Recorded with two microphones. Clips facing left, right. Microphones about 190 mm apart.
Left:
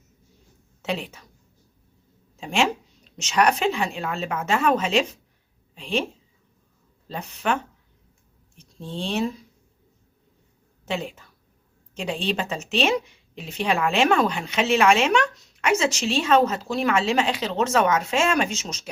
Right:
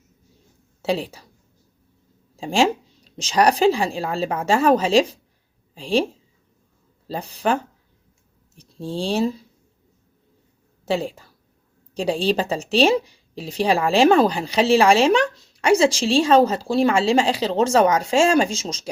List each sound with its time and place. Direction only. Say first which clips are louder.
0.8 s a woman's voice: right 6 dB; 35° right (ahead or behind)
2.3 s speech: right 4 dB; 30° right (ahead or behind)
7.1 s speech: right 4 dB; 35° right (ahead or behind)
10.8 s speech: right 6 dB; 35° right (ahead or behind)